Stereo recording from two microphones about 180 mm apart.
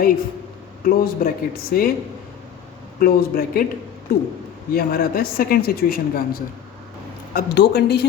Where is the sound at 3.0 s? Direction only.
55° left (ahead or behind).